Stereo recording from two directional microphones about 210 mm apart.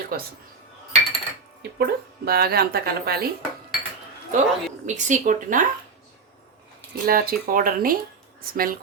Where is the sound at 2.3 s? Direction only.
45° right (ahead or behind).